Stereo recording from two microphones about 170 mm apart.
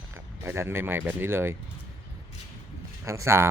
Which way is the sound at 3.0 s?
15° right (ahead or behind).